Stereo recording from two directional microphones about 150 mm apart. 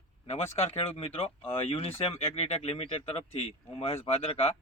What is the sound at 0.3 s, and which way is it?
Speech, 45° left (ahead or behind).